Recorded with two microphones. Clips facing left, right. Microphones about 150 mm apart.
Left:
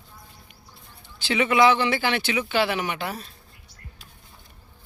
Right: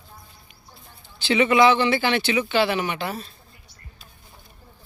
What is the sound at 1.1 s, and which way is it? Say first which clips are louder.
Speech: right 3 dB; 10° left (ahead or behind).